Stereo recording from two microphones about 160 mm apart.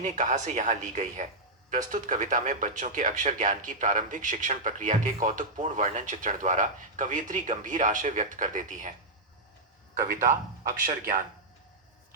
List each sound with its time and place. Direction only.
0.0 s speech: 50° right (ahead or behind)
10.0 s a man's voice: 65° right (ahead or behind)